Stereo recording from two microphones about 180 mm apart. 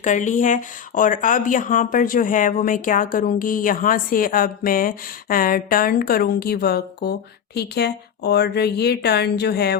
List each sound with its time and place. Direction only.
0.0 s speech: 45° left (ahead or behind); by 9.7 s 65° left (ahead or behind)